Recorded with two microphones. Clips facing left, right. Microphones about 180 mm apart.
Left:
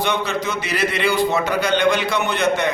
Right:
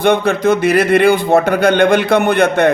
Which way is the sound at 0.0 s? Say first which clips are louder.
Right 9 dB; 55° right (ahead or behind).